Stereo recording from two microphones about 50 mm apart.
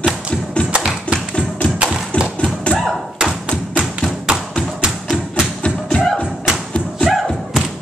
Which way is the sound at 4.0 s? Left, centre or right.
Centre.